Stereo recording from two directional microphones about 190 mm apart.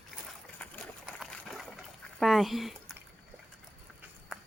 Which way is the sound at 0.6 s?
Centre (ahead or behind).